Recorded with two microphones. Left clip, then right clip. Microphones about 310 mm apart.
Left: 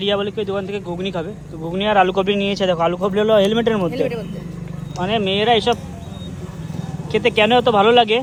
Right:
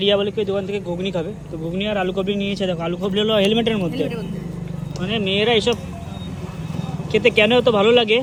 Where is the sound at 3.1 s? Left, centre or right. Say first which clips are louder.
Left 2 dB; left.